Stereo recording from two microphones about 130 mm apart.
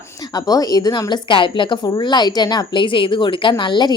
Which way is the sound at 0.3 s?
30° left (ahead or behind).